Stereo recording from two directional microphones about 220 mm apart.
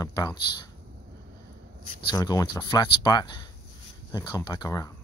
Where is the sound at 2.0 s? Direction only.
20° left (ahead or behind).